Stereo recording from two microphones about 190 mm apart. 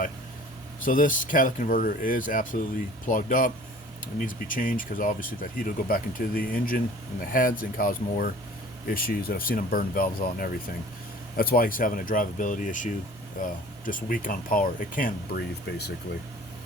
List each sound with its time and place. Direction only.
0.9 s speech: 45° left (ahead or behind)